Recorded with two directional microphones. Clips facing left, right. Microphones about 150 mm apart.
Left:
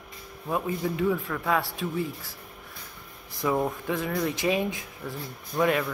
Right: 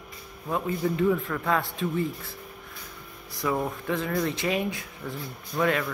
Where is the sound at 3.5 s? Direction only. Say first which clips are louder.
Left 1 dB; 10° left (ahead or behind).